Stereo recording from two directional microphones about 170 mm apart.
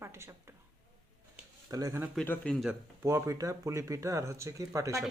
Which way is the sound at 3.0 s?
20° right (ahead or behind).